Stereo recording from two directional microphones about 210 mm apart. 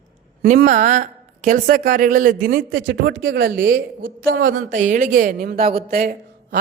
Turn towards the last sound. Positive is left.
turn(degrees=-40)  # may be behind; listen again after turning